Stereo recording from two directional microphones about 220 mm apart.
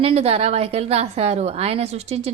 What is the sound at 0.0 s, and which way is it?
A woman's voice, 25° right (ahead or behind).